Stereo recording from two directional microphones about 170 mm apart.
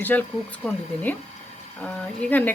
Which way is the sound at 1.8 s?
10° left (ahead or behind).